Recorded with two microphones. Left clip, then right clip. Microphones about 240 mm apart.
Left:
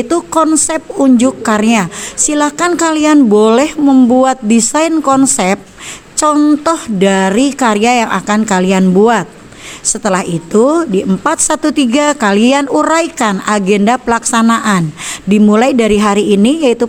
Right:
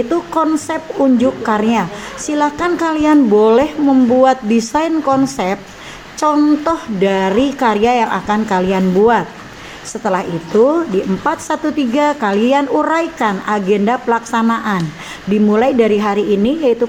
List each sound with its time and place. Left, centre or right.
0.1 s a woman's voice: left
6.3 s a woman's voice: left